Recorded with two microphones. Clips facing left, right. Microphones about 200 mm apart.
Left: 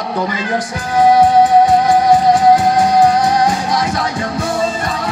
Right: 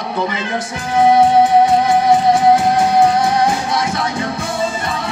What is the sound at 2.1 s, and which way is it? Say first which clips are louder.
Music: left 1 dB; 25° right (ahead or behind).